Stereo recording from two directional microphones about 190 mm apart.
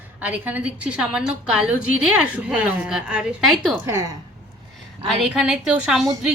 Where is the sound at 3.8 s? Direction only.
15° right (ahead or behind).